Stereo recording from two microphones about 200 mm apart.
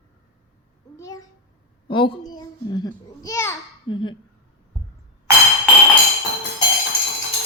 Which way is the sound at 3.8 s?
25° left (ahead or behind).